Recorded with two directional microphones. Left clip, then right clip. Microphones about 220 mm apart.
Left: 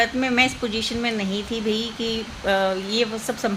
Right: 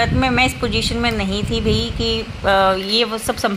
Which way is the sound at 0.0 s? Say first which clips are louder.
Right 3 dB; 10° right (ahead or behind).